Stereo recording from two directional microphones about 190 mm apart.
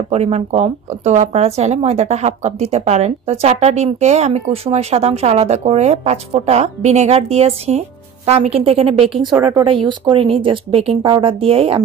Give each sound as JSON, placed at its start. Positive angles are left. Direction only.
{"t": 0.1, "sound": "speech", "side_deg": -35}
{"t": 9.4, "sound": "speech", "side_deg": -15}